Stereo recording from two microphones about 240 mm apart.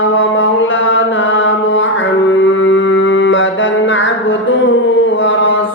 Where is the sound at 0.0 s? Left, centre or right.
Left.